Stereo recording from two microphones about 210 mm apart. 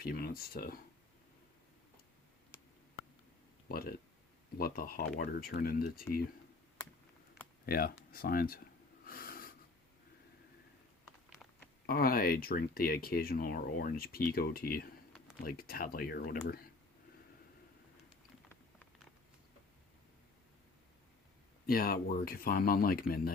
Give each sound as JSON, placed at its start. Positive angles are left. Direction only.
{"t": 0.0, "sound": "speech", "side_deg": 45}
{"t": 3.7, "sound": "speech", "side_deg": 45}
{"t": 7.6, "sound": "speech", "side_deg": 45}
{"t": 9.0, "sound": "snort", "side_deg": 45}
{"t": 11.9, "sound": "speech", "side_deg": 45}
{"t": 21.7, "sound": "speech", "side_deg": 45}